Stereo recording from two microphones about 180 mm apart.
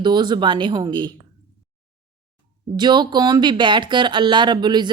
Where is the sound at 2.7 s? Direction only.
25° right (ahead or behind).